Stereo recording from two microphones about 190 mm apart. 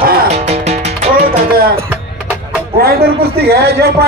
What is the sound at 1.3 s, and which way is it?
Music, 50° right (ahead or behind).